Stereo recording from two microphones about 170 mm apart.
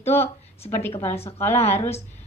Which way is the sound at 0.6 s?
35° left (ahead or behind).